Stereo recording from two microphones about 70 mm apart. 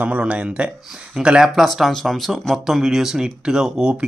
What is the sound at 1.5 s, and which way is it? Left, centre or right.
Speech, centre.